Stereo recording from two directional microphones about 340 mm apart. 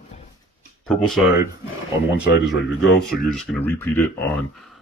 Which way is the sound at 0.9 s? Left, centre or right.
Centre.